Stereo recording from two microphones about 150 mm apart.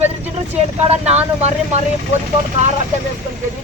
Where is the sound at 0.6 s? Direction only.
45° right (ahead or behind).